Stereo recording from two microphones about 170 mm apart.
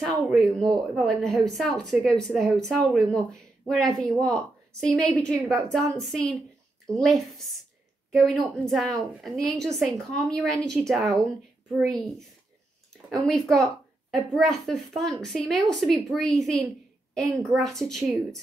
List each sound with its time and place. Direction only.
0.0 s speech: centre (ahead or behind)